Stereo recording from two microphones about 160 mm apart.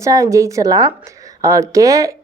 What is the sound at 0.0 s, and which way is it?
Speech, 20° right (ahead or behind).